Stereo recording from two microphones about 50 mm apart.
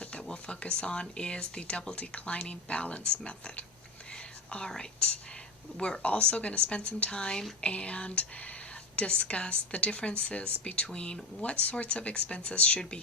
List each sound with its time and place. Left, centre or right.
0.0 s speech: centre
4.1 s whispering: centre
4.7 s speech: centre
6.0 s speech: left